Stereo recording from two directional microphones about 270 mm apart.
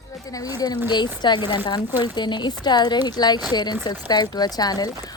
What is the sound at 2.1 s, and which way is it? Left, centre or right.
Speech, centre.